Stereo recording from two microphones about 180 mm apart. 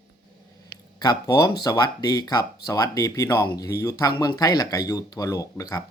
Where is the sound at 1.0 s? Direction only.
20° left (ahead or behind).